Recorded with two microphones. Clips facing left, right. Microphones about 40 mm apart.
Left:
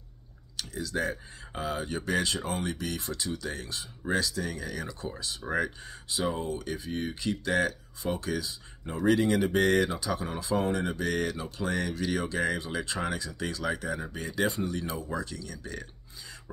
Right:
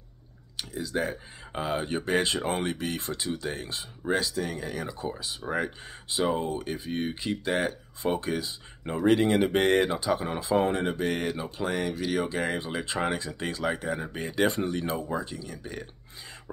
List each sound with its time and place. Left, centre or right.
0.6 s speech: centre
5.2 s speech: centre
5.9 s speech: right
15.0 s speech: right